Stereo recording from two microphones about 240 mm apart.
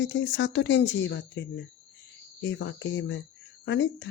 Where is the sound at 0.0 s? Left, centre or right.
Left.